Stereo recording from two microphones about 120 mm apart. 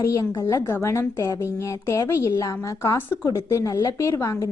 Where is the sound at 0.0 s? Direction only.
25° left (ahead or behind).